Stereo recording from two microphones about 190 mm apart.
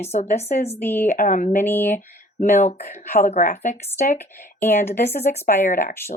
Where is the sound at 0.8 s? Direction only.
10° left (ahead or behind).